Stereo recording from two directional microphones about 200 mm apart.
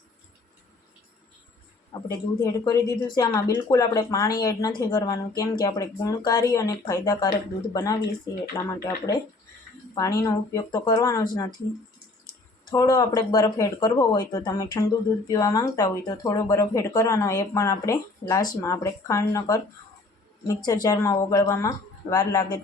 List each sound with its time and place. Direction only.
1.9 s speech: 20° left (ahead or behind)
12.7 s speech: 20° left (ahead or behind)